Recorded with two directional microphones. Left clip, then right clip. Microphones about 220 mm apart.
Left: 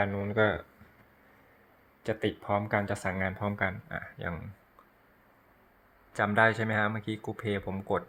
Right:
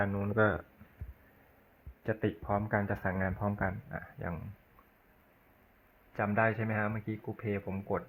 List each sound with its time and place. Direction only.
0.0 s speech: 5° left (ahead or behind)
2.0 s speech: 10° left (ahead or behind)
6.1 s speech: 25° left (ahead or behind)